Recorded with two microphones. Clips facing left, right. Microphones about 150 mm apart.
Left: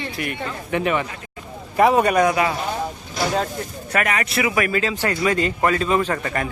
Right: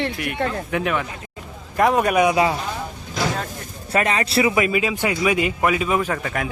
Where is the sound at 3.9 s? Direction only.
25° right (ahead or behind).